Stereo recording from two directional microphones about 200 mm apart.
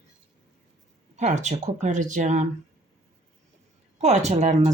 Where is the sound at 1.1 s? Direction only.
35° right (ahead or behind).